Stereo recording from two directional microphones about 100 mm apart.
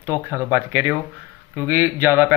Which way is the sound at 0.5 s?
20° right (ahead or behind).